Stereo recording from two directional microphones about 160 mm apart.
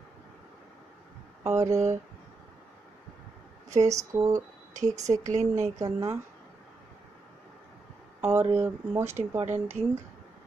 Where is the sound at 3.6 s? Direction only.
20° right (ahead or behind).